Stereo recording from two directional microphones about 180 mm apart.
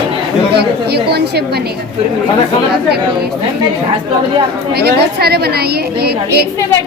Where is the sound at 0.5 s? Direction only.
65° right (ahead or behind).